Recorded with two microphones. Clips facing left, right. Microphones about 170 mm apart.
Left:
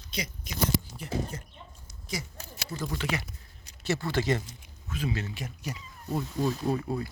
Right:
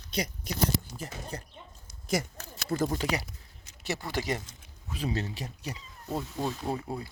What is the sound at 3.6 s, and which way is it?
Speech, 15° right (ahead or behind).